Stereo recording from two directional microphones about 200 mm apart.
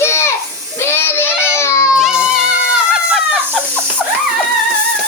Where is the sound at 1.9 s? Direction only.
Centre (ahead or behind).